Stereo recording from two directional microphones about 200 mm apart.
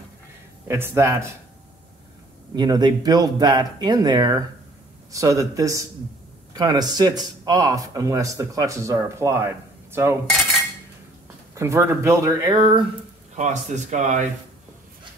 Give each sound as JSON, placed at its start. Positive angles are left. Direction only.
{"t": 0.7, "sound": "speech", "side_deg": -10}
{"t": 2.5, "sound": "speech", "side_deg": -20}
{"t": 11.5, "sound": "speech", "side_deg": -15}
{"t": 13.4, "sound": "speech", "side_deg": -35}